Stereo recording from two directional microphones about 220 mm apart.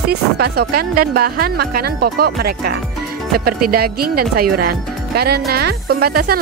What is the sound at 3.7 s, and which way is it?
A woman's voice, 45° right (ahead or behind).